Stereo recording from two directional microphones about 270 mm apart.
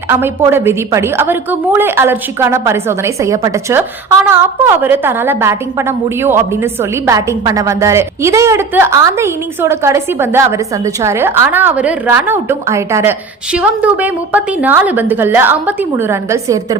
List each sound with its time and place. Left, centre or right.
0.1 s a woman's voice: centre